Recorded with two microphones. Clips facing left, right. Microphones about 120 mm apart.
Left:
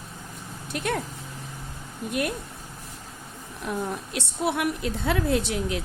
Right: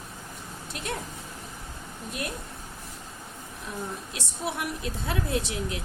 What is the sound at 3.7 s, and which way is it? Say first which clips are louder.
A woman's voice: left 6 dB; 65° left (ahead or behind).